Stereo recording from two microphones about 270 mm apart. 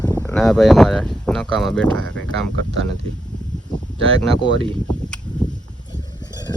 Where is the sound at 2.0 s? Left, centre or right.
Right.